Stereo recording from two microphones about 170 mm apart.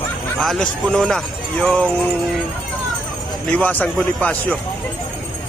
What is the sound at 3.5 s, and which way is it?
Speech, 10° left (ahead or behind).